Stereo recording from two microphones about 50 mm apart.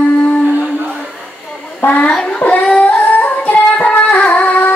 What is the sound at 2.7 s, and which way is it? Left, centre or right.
Music, left.